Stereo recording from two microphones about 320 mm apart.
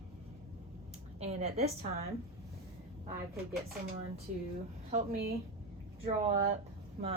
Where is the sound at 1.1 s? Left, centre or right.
Centre.